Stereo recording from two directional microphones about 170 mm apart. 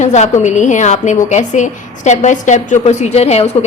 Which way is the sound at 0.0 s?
40° left (ahead or behind).